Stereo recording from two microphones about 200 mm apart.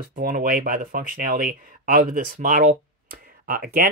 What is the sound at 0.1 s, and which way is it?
Speech, 45° right (ahead or behind).